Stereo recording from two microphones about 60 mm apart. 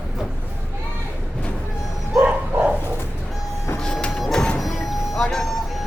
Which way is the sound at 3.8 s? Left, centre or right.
Centre.